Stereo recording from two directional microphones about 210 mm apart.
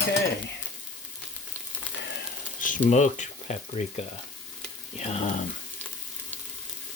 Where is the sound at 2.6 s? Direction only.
40° left (ahead or behind).